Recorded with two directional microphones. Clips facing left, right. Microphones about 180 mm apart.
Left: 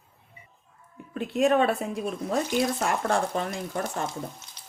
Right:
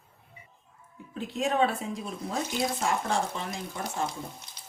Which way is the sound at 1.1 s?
65° left (ahead or behind).